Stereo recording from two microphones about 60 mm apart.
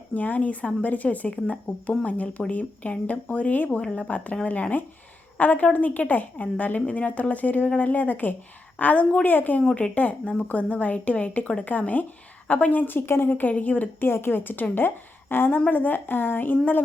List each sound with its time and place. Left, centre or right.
0.1 s a woman's voice: left
5.4 s a woman's voice: left
9.6 s a woman's voice: centre; by 16.8 s left